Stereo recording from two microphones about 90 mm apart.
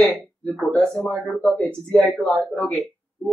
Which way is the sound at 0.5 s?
Centre (ahead or behind).